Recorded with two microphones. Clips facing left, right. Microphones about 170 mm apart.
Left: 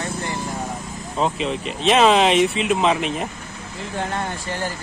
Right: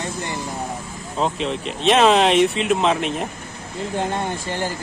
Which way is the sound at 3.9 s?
20° right (ahead or behind).